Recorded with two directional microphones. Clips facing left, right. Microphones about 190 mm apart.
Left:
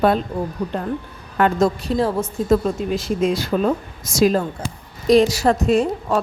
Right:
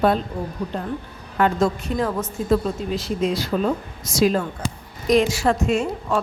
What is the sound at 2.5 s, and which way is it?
A woman's voice, 50° left (ahead or behind).